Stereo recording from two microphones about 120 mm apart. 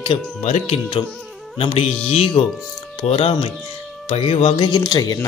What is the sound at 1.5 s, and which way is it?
Speech, 50° left (ahead or behind).